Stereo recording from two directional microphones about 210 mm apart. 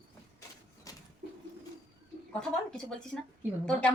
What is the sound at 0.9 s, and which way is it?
Bird, 15° left (ahead or behind).